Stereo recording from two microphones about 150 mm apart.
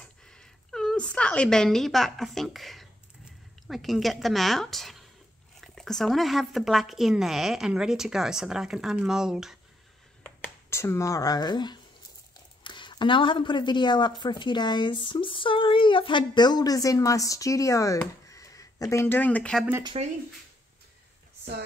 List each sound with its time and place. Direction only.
0.0 s a sound: 5° left (ahead or behind)
5.6 s speech: 5° left (ahead or behind)
10.4 s a woman's voice: 15° left (ahead or behind)
19.9 s speech: 40° right (ahead or behind)